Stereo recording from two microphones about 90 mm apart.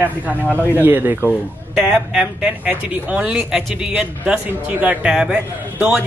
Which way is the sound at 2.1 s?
10° right (ahead or behind).